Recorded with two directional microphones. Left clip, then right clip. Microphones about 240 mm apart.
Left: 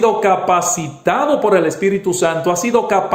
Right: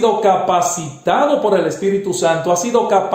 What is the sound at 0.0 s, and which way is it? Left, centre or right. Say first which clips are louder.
A man's voice: even; left.